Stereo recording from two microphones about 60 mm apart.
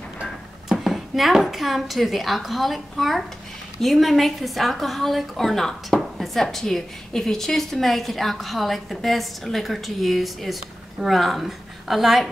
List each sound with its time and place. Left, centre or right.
0.7 s a woman's voice: centre